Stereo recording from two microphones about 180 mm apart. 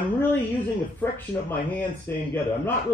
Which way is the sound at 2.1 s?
10° left (ahead or behind).